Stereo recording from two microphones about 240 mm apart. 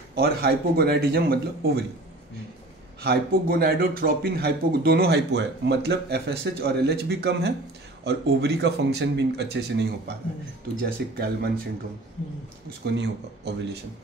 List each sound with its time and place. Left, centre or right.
0.1 s a man's voice: right
3.0 s a man's voice: right
12.6 s speech: right